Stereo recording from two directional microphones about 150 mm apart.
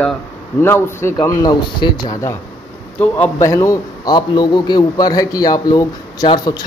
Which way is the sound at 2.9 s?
10° left (ahead or behind).